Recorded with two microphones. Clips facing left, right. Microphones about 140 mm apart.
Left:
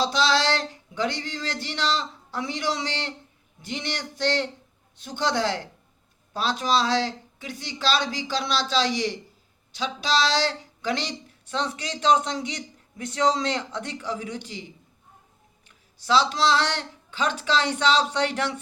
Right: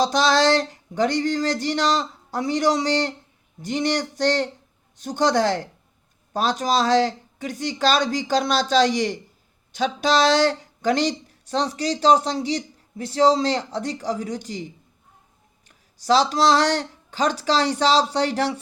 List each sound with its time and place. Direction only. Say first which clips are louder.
0.0 s a sound: right 4 dB; 45° right (ahead or behind)
9.7 s speech: right 5 dB; 50° right (ahead or behind)
16.0 s speech: right 4 dB; 40° right (ahead or behind)